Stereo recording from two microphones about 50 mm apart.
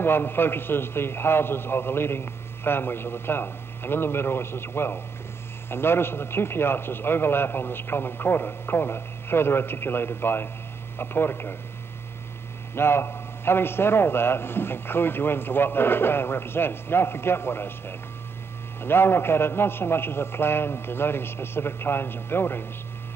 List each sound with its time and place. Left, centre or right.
0.0 s a man's voice: left
12.7 s a man's voice: left